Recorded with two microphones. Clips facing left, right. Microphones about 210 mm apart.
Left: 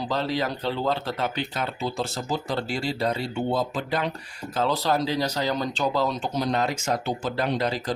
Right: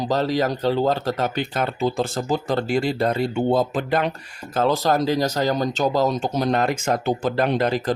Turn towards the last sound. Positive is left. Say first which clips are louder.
# right 5 dB
turn(degrees=-55)  # may be behind; listen again after turning